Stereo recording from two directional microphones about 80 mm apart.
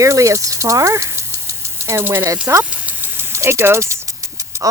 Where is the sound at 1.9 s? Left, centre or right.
Right.